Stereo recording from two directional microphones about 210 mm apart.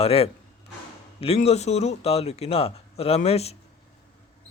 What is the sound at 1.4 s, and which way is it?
A man's voice, 30° left (ahead or behind).